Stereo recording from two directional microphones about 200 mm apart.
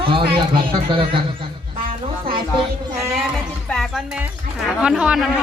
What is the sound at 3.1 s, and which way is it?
Speech, centre (ahead or behind).